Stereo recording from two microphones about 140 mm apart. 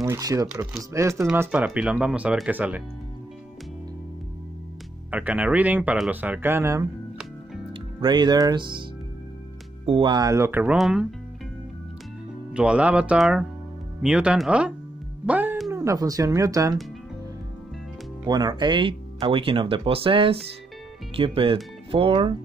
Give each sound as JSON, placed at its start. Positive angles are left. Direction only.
{"t": 0.0, "sound": "speech", "side_deg": -25}
{"t": 5.1, "sound": "speech", "side_deg": -10}
{"t": 8.0, "sound": "speech", "side_deg": -30}
{"t": 9.8, "sound": "speech", "side_deg": -35}
{"t": 12.5, "sound": "speech", "side_deg": -10}
{"t": 15.2, "sound": "music", "side_deg": -10}
{"t": 15.7, "sound": "speech", "side_deg": -20}
{"t": 18.2, "sound": "speech", "side_deg": -30}